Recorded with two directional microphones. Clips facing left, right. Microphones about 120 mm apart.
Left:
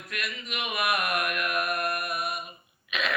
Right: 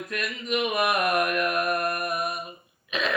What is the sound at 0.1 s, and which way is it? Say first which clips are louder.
Mantra: right 7 dB; 35° right (ahead or behind).